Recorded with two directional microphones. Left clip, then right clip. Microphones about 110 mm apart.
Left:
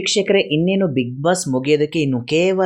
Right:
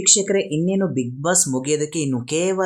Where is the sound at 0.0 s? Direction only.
25° left (ahead or behind).